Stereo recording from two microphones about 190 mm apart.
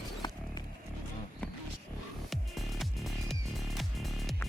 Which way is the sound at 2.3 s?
Centre (ahead or behind).